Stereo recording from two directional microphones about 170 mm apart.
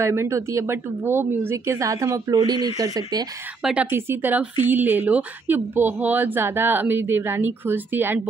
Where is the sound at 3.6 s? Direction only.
5° right (ahead or behind).